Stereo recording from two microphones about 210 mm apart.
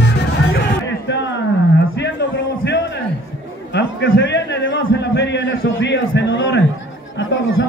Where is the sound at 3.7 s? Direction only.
55° left (ahead or behind).